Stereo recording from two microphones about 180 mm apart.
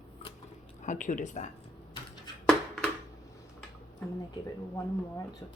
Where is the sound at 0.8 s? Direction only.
45° left (ahead or behind).